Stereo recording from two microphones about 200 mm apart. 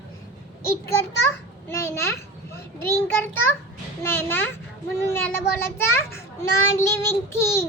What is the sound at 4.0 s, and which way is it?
Child singing, 10° left (ahead or behind).